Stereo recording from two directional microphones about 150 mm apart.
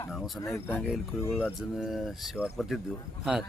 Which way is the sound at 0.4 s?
20° left (ahead or behind).